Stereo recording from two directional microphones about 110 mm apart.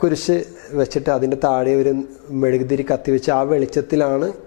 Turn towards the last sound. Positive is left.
turn(degrees=15)  # may be behind; listen again after turning